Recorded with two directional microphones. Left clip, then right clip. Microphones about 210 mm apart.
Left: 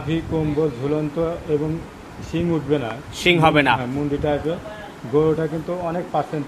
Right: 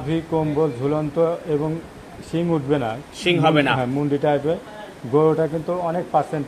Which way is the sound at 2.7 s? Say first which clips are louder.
Even; 35° right (ahead or behind).